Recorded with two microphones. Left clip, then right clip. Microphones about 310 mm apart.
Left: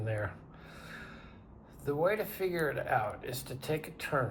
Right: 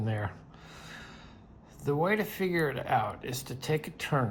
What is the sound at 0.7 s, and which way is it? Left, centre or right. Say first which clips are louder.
Snort: right 1 dB; centre.